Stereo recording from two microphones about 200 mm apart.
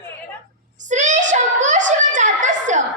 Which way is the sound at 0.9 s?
35° right (ahead or behind).